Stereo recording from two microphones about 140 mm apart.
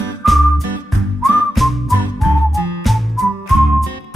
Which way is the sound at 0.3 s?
Centre (ahead or behind).